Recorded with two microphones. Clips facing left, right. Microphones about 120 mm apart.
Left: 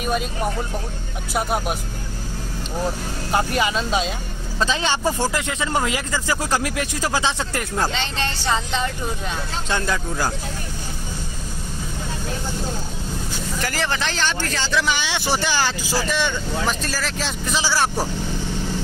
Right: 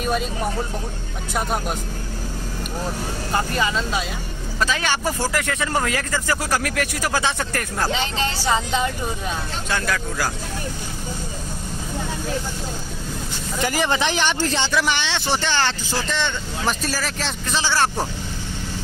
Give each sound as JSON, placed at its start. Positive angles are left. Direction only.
{"t": 0.0, "sound": "speech", "side_deg": 5}
{"t": 1.3, "sound": "speech", "side_deg": 5}
{"t": 3.3, "sound": "speech", "side_deg": 15}
{"t": 7.9, "sound": "speech", "side_deg": -10}
{"t": 9.7, "sound": "speech", "side_deg": 25}
{"t": 13.6, "sound": "speech", "side_deg": -15}
{"t": 14.9, "sound": "speech", "side_deg": 5}
{"t": 16.6, "sound": "speech", "side_deg": -5}
{"t": 17.5, "sound": "speech", "side_deg": 5}